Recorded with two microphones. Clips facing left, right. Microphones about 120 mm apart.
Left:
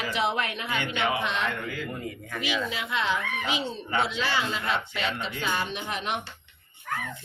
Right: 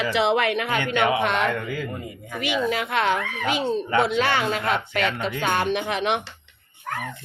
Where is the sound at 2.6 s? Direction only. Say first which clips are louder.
Right 6 dB; 60° right (ahead or behind); by 6.3 s 85° right.